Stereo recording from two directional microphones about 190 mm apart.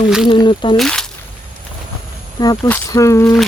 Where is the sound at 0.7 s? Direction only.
5° left (ahead or behind).